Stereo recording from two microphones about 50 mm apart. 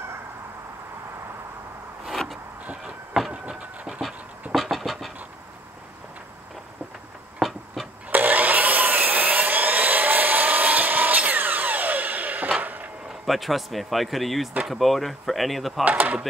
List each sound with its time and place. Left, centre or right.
3.1 s vehicle: centre
4.6 s vehicle: centre
7.3 s a sound: centre
8.1 s sawing: right
12.5 s a sound: right
13.1 s speech: centre
15.8 s speech: right